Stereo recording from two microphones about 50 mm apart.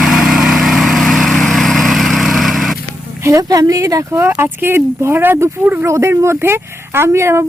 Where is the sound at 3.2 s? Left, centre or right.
Right.